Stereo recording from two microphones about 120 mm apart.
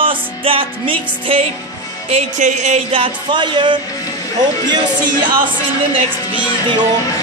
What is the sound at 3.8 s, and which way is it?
Speech, 30° left (ahead or behind).